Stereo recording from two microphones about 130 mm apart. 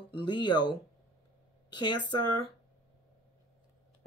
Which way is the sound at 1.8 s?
35° left (ahead or behind).